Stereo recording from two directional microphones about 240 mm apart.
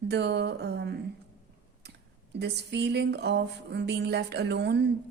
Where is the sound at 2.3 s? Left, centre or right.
Right.